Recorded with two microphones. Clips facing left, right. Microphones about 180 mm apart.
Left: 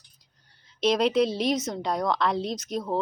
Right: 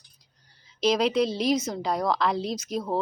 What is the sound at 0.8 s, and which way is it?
A woman's voice, centre (ahead or behind).